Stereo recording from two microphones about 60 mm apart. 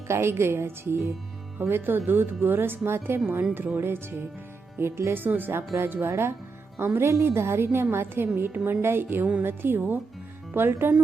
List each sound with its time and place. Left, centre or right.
0.1 s a woman's voice: right
5.2 s a woman's voice: right